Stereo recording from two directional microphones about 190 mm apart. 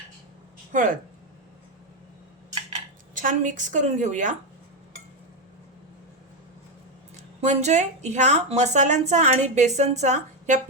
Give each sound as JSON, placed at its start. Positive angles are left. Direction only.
{"t": 0.7, "sound": "speech", "side_deg": -45}
{"t": 3.2, "sound": "a woman's voice", "side_deg": -45}
{"t": 7.4, "sound": "a woman's voice", "side_deg": -40}